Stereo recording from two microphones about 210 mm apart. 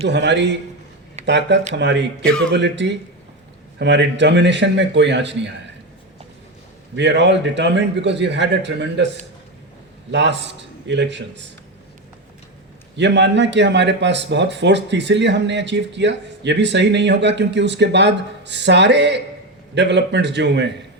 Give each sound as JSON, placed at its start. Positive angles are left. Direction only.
{"t": 0.1, "sound": "speech", "side_deg": -55}
{"t": 6.9, "sound": "speech", "side_deg": -55}
{"t": 13.0, "sound": "speech", "side_deg": -55}